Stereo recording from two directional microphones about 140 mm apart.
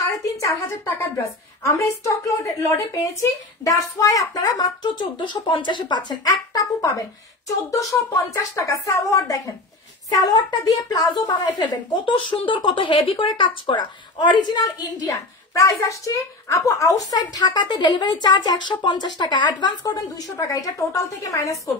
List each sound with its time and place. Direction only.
0.2 s a woman's voice: 20° left (ahead or behind)
8.3 s a woman's voice: 20° left (ahead or behind)